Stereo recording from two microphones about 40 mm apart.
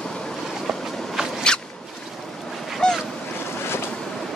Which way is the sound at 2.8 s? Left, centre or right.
Centre.